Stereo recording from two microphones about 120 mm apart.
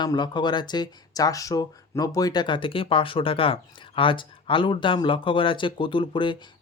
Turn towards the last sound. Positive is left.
turn(degrees=45)  # may be behind; listen again after turning